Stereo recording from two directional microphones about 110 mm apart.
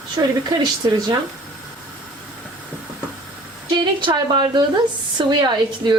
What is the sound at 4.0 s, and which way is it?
A woman's voice, 45° right (ahead or behind).